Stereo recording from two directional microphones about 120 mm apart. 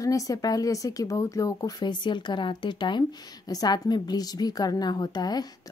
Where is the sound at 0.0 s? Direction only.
30° left (ahead or behind).